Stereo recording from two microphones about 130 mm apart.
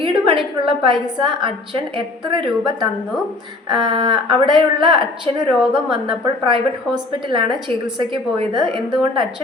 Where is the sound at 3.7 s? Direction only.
35° right (ahead or behind).